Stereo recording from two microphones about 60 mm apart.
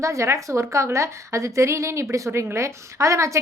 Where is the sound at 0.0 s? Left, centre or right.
Right.